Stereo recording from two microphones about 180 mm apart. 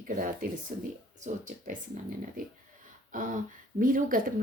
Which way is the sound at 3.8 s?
50° right (ahead or behind).